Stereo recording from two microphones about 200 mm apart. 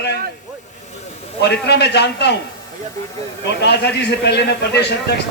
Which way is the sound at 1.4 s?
55° left (ahead or behind).